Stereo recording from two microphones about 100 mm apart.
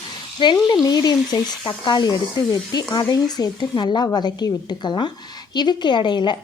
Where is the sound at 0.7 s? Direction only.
40° left (ahead or behind).